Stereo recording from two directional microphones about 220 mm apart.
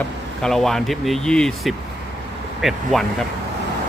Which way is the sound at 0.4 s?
Centre (ahead or behind).